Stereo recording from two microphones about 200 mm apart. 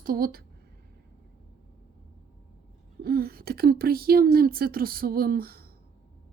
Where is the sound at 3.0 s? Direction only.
50° right (ahead or behind).